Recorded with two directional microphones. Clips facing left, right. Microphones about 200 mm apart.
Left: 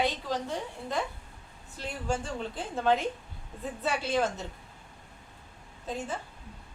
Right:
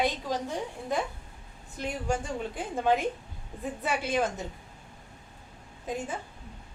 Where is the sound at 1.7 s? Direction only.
15° right (ahead or behind).